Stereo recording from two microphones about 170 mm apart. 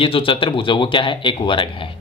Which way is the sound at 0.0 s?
30° left (ahead or behind).